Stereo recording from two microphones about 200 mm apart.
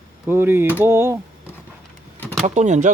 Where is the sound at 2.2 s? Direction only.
10° left (ahead or behind).